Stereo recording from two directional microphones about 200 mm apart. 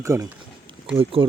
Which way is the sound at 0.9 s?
30° right (ahead or behind).